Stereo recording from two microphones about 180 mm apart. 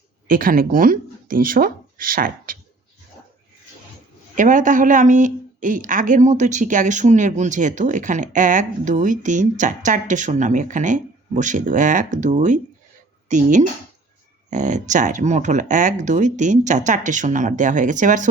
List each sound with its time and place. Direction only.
0.3 s speech: 50° right (ahead or behind)
4.4 s a woman's voice: 45° right (ahead or behind)